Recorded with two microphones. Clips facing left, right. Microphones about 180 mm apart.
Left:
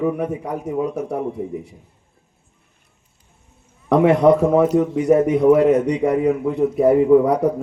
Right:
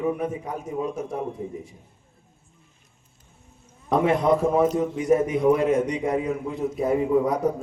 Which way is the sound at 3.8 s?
65° left (ahead or behind).